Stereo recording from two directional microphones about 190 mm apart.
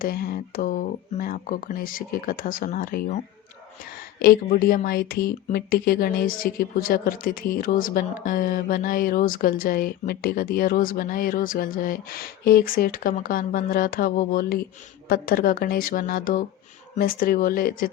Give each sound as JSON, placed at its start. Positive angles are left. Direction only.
{"t": 0.0, "sound": "a woman's voice", "side_deg": 50}
{"t": 4.2, "sound": "a woman's voice", "side_deg": 50}